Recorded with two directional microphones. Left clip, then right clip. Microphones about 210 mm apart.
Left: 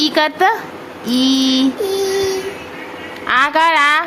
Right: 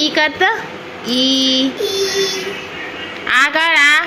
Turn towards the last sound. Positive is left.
turn(degrees=15)  # may be behind; listen again after turning